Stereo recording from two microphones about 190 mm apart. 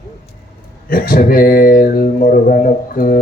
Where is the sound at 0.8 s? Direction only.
50° left (ahead or behind).